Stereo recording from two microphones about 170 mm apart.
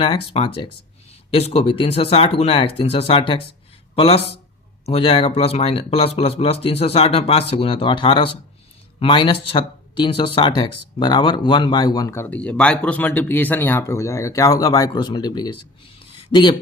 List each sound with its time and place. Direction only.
0.0 s speech: 30° left (ahead or behind)